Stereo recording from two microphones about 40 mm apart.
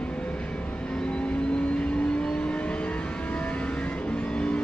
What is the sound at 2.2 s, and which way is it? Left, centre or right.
Vehicle, left.